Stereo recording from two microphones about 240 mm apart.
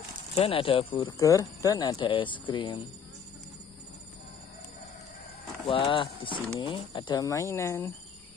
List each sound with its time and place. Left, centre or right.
0.4 s speech: left
5.7 s speech: left